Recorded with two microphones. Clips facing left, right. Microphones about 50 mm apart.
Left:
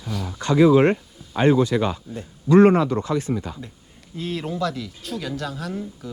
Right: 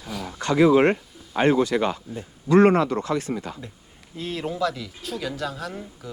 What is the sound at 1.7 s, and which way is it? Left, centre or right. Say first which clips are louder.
Speech: left 1 dB; right.